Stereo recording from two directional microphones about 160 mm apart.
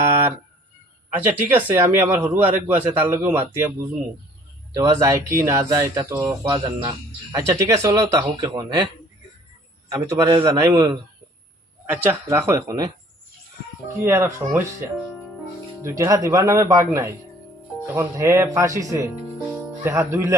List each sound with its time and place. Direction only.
1.3 s a man's voice: 10° right (ahead or behind)
4.7 s speech: 20° right (ahead or behind)
9.9 s a man's voice: 25° right (ahead or behind)
15.8 s speech: 20° right (ahead or behind)
19.5 s music: 15° right (ahead or behind)